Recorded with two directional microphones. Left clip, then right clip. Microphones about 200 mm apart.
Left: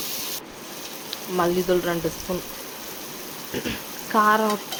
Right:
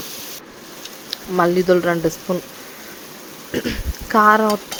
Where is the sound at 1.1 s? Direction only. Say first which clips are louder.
Right 6 dB; 25° right (ahead or behind).